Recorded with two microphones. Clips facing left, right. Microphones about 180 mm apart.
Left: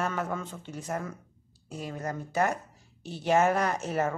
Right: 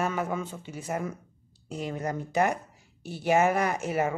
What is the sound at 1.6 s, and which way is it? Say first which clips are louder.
Speech: right 3 dB; 20° right (ahead or behind).